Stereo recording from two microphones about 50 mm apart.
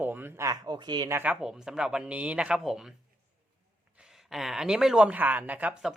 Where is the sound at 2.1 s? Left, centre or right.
Right.